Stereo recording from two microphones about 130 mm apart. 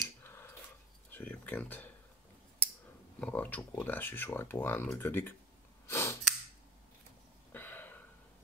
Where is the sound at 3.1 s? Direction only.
10° left (ahead or behind).